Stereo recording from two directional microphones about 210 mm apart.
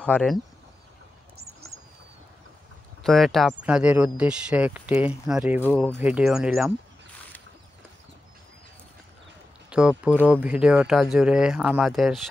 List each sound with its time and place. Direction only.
0.0 s speech: 5° left (ahead or behind)
3.0 s speech: centre (ahead or behind)
9.7 s speech: 5° right (ahead or behind)